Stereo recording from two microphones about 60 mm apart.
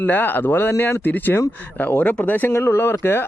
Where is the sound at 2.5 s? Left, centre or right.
Left.